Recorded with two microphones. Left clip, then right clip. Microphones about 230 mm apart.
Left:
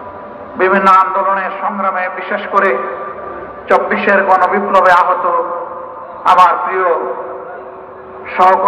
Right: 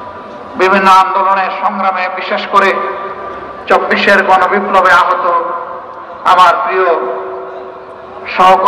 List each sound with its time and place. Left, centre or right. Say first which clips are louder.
0.6 s a man's voice: right 2 dB; right
8.3 s a man's voice: right 2 dB; right